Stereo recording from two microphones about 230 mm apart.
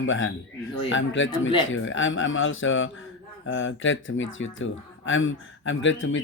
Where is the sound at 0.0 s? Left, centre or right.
Left.